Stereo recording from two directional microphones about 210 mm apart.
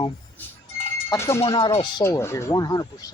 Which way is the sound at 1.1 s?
15° left (ahead or behind).